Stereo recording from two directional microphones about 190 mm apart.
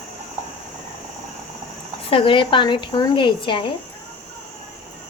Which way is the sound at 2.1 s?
25° left (ahead or behind).